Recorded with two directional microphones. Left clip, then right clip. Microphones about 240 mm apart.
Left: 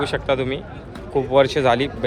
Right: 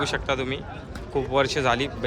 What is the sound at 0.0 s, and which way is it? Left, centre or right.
Speech, centre.